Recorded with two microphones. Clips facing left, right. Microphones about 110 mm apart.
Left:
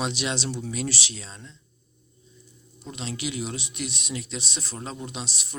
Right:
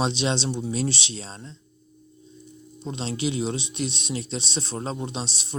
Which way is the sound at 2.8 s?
30° right (ahead or behind).